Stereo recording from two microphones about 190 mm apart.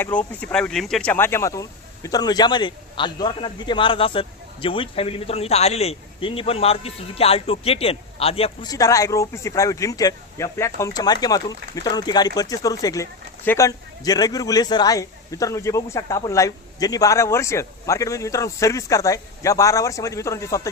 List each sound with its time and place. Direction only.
0.0 s a man's voice: 10° left (ahead or behind); by 8.5 s 30° left (ahead or behind)
8.6 s speech: 20° left (ahead or behind)